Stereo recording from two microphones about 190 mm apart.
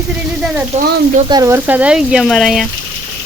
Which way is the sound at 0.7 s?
35° right (ahead or behind).